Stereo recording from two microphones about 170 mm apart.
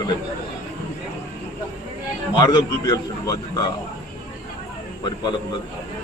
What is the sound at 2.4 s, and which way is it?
A man's voice, 25° left (ahead or behind).